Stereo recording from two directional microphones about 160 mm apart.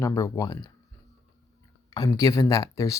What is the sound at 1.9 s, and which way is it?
Speech, 25° left (ahead or behind).